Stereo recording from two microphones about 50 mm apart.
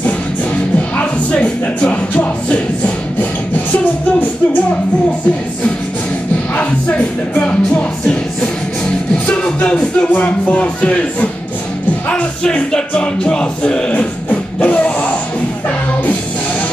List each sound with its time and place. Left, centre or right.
0.7 s music: left
6.5 s music: left
10.1 s speech: left
12.7 s music: left